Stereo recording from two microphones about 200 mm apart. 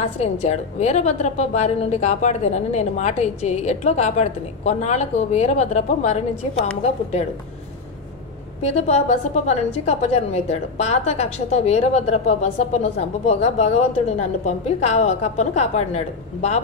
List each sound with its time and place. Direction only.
0.2 s a woman's voice: 35° left (ahead or behind)
8.6 s a woman's voice: 35° left (ahead or behind)